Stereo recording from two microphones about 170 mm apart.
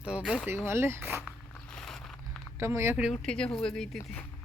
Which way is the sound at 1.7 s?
5° left (ahead or behind).